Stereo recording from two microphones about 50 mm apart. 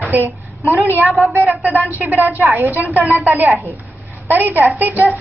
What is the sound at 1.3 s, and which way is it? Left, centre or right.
Speech, right.